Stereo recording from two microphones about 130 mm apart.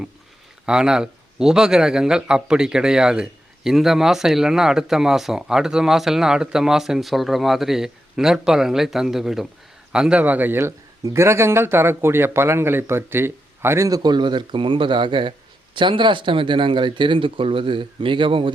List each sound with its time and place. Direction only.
0.6 s speech: 5° right (ahead or behind); by 18.5 s 40° right (ahead or behind)